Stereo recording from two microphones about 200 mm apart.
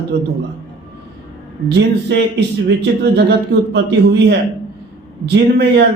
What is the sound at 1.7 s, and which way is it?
Speech, 60° right (ahead or behind).